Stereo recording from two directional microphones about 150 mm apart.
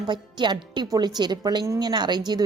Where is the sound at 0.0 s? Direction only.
30° right (ahead or behind).